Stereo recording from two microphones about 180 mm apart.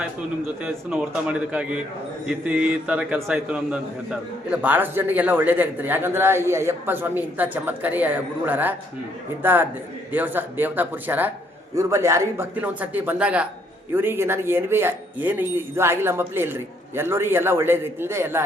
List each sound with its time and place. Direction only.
0.6 s a man's voice: 5° right (ahead or behind)